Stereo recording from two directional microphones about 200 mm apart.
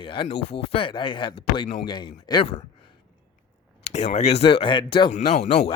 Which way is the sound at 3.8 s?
30° left (ahead or behind).